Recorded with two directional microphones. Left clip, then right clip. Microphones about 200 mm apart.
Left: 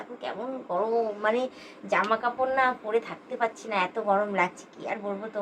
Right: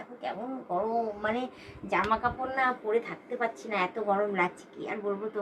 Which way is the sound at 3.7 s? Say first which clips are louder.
Left 3 dB; 25° left (ahead or behind).